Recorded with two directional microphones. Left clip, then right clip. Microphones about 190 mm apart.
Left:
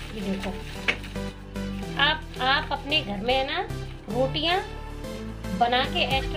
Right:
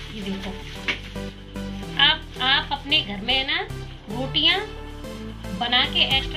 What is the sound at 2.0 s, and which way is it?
Music, 45° left (ahead or behind).